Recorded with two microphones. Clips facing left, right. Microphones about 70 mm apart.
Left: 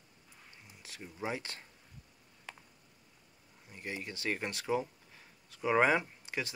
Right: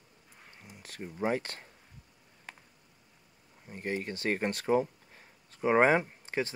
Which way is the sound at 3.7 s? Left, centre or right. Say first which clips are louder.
Right 7 dB; right.